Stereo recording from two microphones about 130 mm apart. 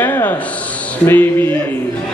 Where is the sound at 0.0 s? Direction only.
15° left (ahead or behind).